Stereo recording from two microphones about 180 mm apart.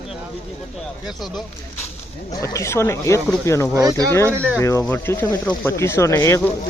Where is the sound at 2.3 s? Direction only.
15° left (ahead or behind).